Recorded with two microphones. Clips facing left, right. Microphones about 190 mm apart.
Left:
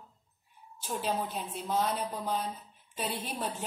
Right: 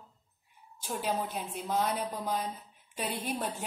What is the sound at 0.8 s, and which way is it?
A woman's voice, 10° right (ahead or behind).